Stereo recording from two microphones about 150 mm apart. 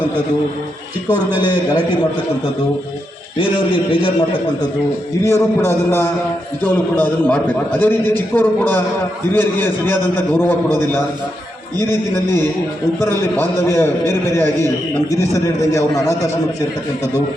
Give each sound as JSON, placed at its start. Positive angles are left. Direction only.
{"t": 1.5, "sound": "a man's voice", "side_deg": 30}
{"t": 3.3, "sound": "a man's voice", "side_deg": 35}
{"t": 5.3, "sound": "a man's voice", "side_deg": 15}